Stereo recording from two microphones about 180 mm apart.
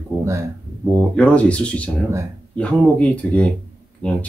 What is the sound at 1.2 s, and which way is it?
Speech, 5° left (ahead or behind).